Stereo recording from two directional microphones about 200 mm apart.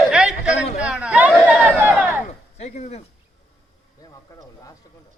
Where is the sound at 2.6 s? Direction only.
35° left (ahead or behind).